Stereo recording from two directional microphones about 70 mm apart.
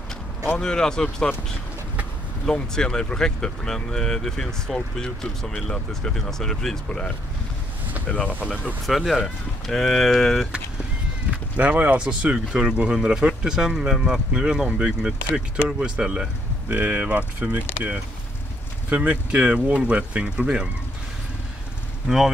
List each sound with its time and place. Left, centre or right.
0.6 s speech: centre
2.4 s speech: centre
8.8 s speech: centre
11.2 s speech: right
22.0 s speech: centre